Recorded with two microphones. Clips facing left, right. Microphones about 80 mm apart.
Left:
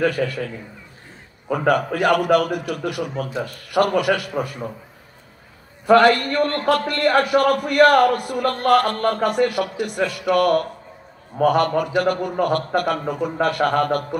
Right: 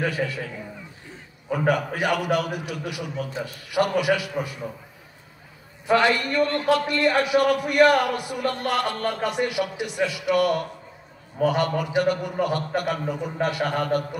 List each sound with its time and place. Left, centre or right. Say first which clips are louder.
0.0 s a man's voice: left 5 dB; left
2.0 s a man's voice: left 6 dB; left
5.9 s a man's voice: left 6 dB; left